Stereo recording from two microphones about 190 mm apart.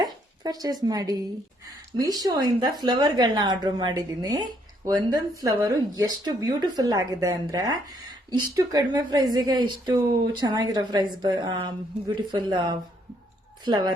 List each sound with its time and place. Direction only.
0.0 s speech: 20° right (ahead or behind)